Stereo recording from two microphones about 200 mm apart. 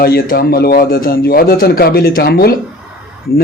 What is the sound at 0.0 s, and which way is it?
Speech, 50° left (ahead or behind).